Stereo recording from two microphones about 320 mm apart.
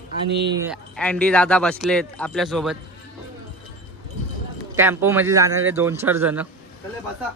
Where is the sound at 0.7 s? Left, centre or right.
Centre.